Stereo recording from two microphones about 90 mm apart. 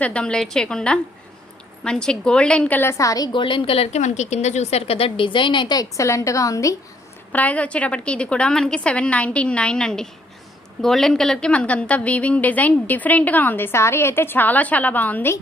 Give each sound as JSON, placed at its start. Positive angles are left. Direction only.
{"t": 0.0, "sound": "a woman's voice", "side_deg": 15}
{"t": 3.0, "sound": "a woman's voice", "side_deg": 40}
{"t": 3.3, "sound": "a woman's voice", "side_deg": 70}
{"t": 4.9, "sound": "a woman's voice", "side_deg": 90}
{"t": 5.7, "sound": "a woman's voice", "side_deg": 40}
{"t": 7.3, "sound": "a woman's voice", "side_deg": 15}